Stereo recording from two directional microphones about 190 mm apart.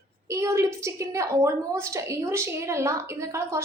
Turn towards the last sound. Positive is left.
turn(degrees=-15)  # may be behind; listen again after turning